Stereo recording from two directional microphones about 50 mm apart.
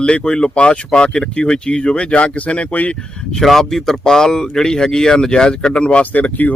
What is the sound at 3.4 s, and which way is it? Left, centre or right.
Speech, centre.